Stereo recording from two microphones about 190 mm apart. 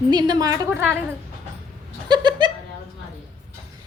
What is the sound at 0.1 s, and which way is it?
Speech, 20° right (ahead or behind).